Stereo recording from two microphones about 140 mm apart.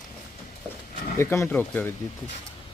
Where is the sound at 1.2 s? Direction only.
15° left (ahead or behind).